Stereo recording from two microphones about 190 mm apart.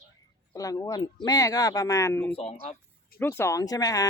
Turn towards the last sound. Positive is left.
turn(degrees=20)  # may be behind; listen again after turning